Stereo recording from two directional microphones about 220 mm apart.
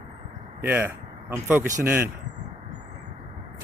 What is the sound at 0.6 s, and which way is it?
Speech, 10° right (ahead or behind).